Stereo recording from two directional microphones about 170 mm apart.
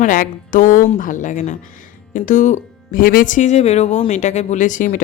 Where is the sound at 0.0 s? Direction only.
50° left (ahead or behind).